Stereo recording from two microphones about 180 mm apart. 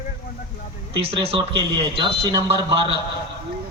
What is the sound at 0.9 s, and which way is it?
Speech, 30° right (ahead or behind).